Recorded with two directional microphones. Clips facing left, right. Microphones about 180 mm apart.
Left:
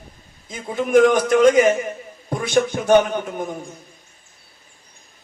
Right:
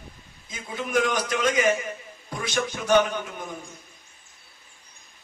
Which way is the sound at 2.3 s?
50° left (ahead or behind).